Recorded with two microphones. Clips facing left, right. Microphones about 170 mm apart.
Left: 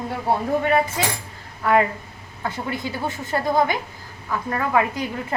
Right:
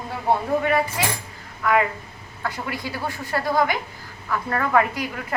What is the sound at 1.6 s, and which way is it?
A woman's voice, 35° left (ahead or behind).